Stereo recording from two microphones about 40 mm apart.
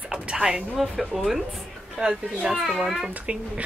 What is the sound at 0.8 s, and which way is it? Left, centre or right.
Speech, centre.